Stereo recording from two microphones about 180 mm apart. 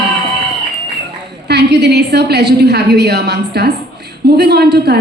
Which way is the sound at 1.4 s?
70° right (ahead or behind).